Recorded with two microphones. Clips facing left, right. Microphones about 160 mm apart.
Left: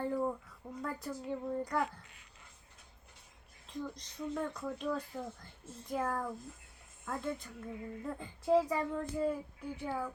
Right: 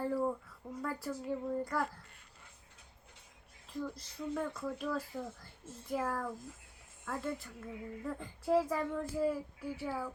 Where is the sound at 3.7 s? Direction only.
5° right (ahead or behind).